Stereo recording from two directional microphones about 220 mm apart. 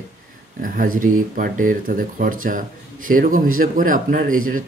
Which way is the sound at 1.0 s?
40° right (ahead or behind).